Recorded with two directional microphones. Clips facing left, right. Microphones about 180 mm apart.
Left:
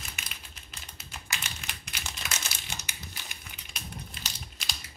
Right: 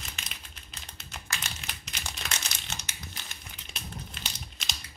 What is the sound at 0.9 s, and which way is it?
Typing, 10° left (ahead or behind).